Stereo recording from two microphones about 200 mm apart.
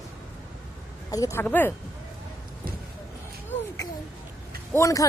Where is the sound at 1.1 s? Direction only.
15° left (ahead or behind).